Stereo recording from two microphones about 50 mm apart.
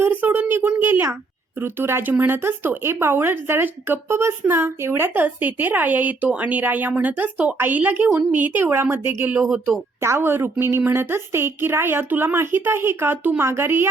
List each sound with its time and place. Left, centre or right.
0.0 s a woman's voice: right
8.6 s speech: right
12.0 s speech: right